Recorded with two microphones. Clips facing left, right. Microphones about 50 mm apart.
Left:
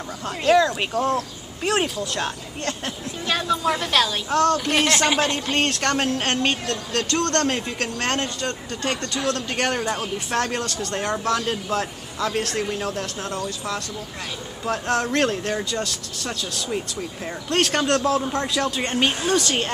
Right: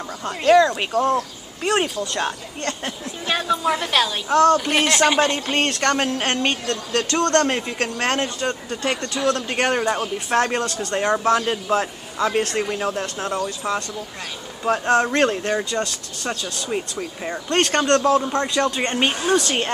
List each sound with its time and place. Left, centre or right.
0.2 s a woman's voice: centre
17.3 s a man's voice: centre